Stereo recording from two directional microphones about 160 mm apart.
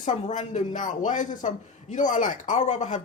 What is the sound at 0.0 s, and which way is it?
Speech, 50° left (ahead or behind).